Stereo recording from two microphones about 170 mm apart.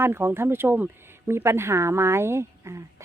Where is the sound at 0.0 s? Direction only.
15° right (ahead or behind).